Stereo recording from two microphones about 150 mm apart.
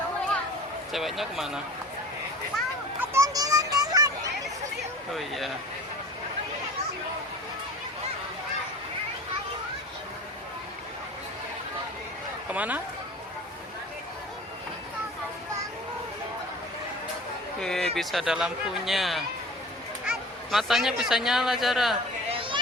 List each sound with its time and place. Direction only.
0.9 s speech: centre (ahead or behind)
3.0 s children playing: 15° right (ahead or behind)
5.1 s speech: centre (ahead or behind)
12.5 s speech: 10° right (ahead or behind)
17.6 s speech: 5° left (ahead or behind)
22.3 s a sound: 35° right (ahead or behind)